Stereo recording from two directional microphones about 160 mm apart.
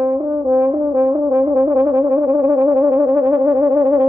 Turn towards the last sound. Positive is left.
turn(degrees=-20)  # may be behind; listen again after turning